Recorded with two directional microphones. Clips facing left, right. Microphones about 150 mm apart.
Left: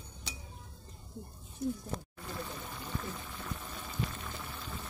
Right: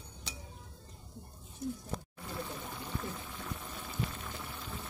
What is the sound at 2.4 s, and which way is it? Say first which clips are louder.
Pour: right 1 dB; 10° right (ahead or behind).